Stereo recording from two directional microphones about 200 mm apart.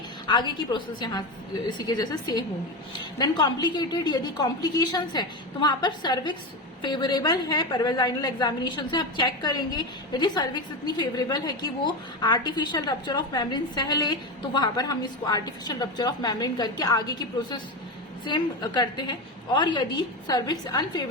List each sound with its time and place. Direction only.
0.3 s a woman's voice: 25° left (ahead or behind)